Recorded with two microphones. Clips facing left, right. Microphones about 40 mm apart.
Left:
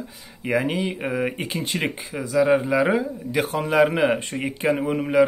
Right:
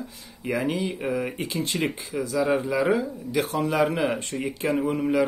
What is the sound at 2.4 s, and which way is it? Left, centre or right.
Speech, centre.